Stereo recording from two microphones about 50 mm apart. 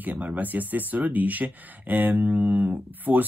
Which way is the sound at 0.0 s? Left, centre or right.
Right.